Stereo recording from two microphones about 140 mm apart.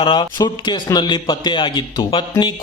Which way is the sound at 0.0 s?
35° left (ahead or behind).